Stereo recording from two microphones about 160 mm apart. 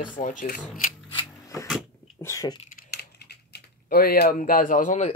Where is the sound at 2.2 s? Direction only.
20° left (ahead or behind).